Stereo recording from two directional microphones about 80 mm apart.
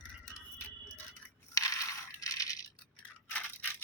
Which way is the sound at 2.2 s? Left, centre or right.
Left.